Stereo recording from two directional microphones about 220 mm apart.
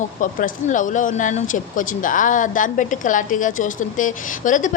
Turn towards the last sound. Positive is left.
turn(degrees=35)  # may be behind; listen again after turning